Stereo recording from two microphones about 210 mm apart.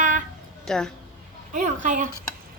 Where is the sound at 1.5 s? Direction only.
40° right (ahead or behind).